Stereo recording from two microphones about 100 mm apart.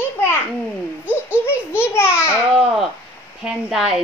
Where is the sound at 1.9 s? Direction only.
25° left (ahead or behind).